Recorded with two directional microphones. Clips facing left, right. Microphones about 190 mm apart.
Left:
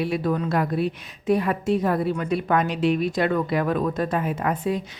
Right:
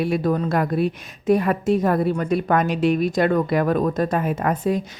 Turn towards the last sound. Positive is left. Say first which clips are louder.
# right 3 dB
turn(degrees=-45)  # may be behind; listen again after turning